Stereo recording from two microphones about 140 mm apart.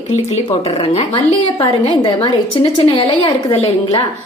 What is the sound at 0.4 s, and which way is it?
A woman's voice, 45° left (ahead or behind).